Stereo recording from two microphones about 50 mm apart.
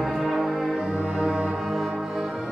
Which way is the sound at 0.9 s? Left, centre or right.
Centre.